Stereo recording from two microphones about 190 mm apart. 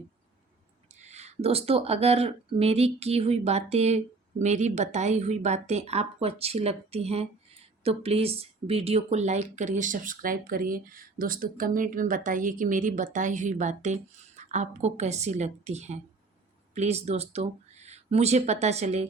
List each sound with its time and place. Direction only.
0.9 s speech: 35° right (ahead or behind)